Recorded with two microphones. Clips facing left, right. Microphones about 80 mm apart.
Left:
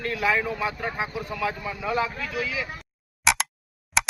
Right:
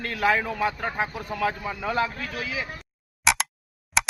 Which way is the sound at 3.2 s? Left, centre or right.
Centre.